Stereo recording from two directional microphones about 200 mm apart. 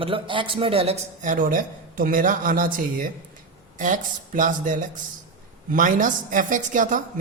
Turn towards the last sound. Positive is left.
turn(degrees=-40)  # may be behind; listen again after turning